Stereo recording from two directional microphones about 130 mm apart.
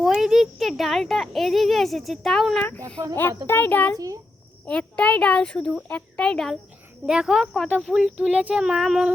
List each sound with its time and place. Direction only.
0.0 s a child's voice: 5° right (ahead or behind)
3.2 s a child's voice: 15° left (ahead or behind); by 9.1 s 5° right (ahead or behind)